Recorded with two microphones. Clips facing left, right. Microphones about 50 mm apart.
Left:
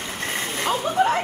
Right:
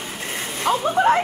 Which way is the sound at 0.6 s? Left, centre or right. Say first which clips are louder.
Right 4 dB; right.